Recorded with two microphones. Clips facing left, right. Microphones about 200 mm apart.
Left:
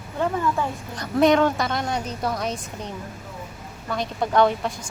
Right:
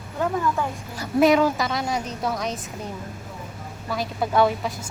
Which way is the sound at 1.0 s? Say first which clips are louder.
Even; 5° right (ahead or behind).